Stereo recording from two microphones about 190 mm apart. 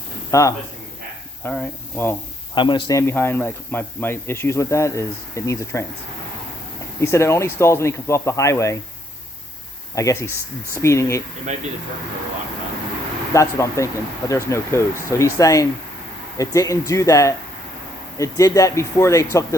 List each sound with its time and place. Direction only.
0.3 s speech: 15° left (ahead or behind)
2.6 s a man's voice: 25° left (ahead or behind)
3.1 s speech: 10° left (ahead or behind)
7.0 s speech: 15° left (ahead or behind)
9.9 s speech: 15° left (ahead or behind)
13.3 s speech: 15° left (ahead or behind)